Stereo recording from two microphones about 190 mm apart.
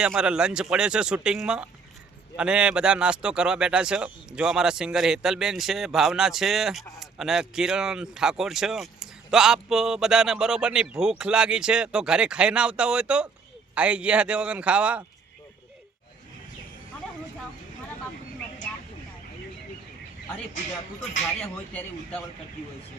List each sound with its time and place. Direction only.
0.0 s a man's voice: 5° right (ahead or behind)